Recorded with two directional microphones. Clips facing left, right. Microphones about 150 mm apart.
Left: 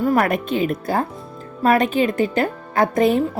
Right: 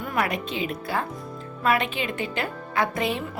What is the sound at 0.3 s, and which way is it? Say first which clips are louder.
A woman's voice: left 8 dB; 50° left (ahead or behind).